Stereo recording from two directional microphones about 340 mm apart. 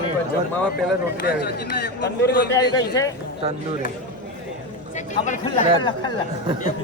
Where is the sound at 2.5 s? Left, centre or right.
Centre.